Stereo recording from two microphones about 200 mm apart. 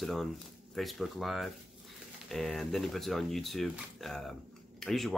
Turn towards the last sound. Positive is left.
turn(degrees=0)  # may be behind; listen again after turning